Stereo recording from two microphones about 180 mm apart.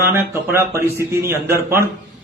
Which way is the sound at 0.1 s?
15° right (ahead or behind).